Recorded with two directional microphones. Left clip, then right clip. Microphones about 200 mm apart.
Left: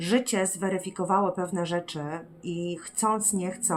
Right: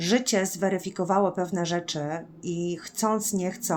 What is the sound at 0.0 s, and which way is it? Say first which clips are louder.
Speech: right 1 dB; 25° right (ahead or behind).